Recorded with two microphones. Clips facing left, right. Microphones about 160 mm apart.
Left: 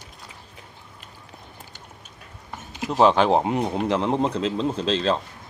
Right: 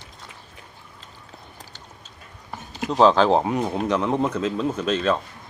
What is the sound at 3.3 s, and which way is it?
Speech, 25° left (ahead or behind).